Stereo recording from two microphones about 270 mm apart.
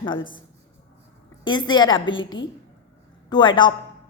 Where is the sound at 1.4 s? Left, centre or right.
Centre.